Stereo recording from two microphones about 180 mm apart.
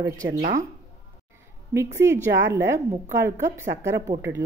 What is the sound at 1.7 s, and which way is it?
Speech, 15° right (ahead or behind).